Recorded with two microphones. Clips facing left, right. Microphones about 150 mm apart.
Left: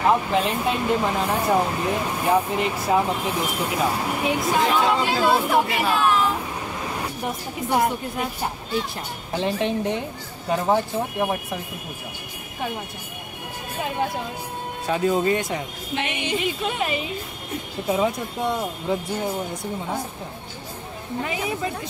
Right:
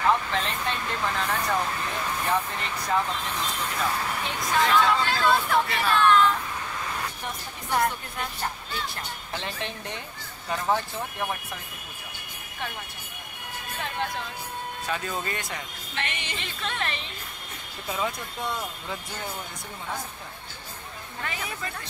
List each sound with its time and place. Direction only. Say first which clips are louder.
0.3 s speech: left 7 dB; 10° left (ahead or behind)
1.4 s speech: left 7 dB; 30° left (ahead or behind)
2.2 s speech: left 9 dB; 10° left (ahead or behind)
13.7 s speech: left 6 dB; 10° left (ahead or behind)
21.2 s speech: left 8 dB; 10° left (ahead or behind)